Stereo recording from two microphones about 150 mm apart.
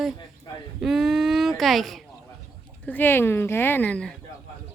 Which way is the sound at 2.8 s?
15° left (ahead or behind).